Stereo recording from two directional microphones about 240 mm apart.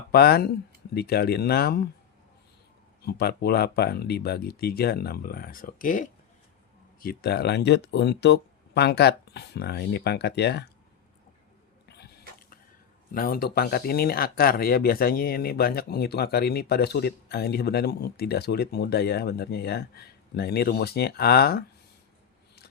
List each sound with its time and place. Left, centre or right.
0.1 s speech: left
3.1 s speech: left
13.1 s speech: left